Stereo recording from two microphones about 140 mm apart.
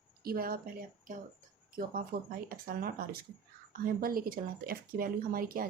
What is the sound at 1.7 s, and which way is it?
Speech, 90° right.